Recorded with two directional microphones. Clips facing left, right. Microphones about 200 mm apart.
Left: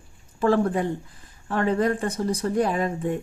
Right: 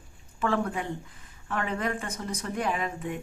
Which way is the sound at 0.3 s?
35° left (ahead or behind).